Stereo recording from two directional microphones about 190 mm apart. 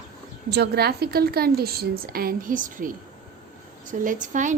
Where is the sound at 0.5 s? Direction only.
60° right (ahead or behind).